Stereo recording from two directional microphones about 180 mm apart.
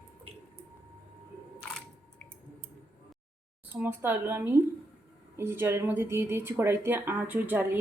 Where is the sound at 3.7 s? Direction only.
10° right (ahead or behind).